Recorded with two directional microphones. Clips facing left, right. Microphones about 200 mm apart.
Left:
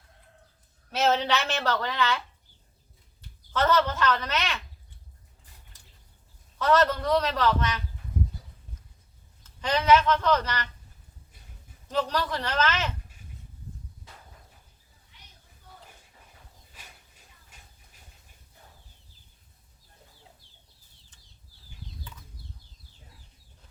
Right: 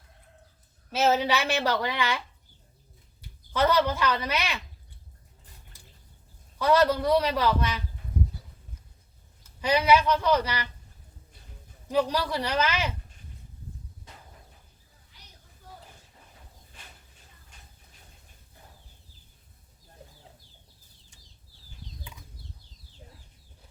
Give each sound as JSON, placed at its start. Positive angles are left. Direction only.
{"t": 0.9, "sound": "a woman's voice", "side_deg": -5}
{"t": 6.6, "sound": "a woman's voice", "side_deg": -10}
{"t": 9.4, "sound": "a woman's voice", "side_deg": -10}
{"t": 11.9, "sound": "a woman's voice", "side_deg": -10}
{"t": 15.1, "sound": "children playing", "side_deg": -35}
{"t": 16.7, "sound": "a sound", "side_deg": 5}
{"t": 21.1, "sound": "bird flight", "side_deg": -10}